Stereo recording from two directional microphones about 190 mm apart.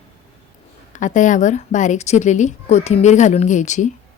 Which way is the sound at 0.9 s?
40° left (ahead or behind).